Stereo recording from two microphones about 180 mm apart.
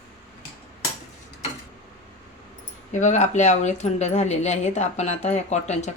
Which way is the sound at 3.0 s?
40° left (ahead or behind).